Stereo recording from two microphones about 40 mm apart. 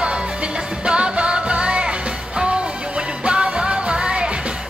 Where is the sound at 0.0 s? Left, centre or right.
Right.